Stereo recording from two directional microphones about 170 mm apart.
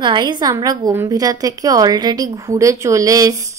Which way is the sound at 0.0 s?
25° right (ahead or behind).